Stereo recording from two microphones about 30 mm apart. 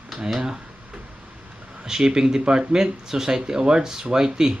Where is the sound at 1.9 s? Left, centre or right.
Right.